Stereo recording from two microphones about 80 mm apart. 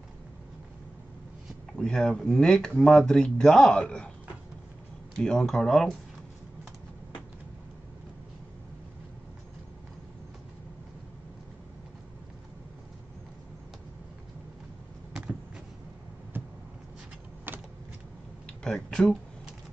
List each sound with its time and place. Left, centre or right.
1.7 s speech: centre
5.2 s speech: centre
17.5 s vehicle: right
18.6 s a sound: centre